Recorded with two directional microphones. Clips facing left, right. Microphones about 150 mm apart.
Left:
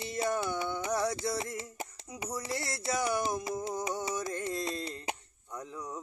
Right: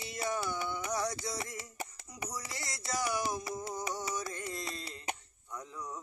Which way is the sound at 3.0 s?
25° left (ahead or behind).